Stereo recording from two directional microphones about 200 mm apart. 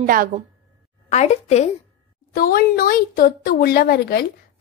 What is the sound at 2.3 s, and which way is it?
Speech, 45° left (ahead or behind).